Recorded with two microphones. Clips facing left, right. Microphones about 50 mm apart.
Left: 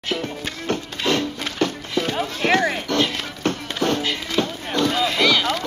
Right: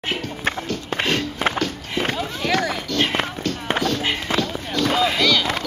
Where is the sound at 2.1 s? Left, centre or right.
Left.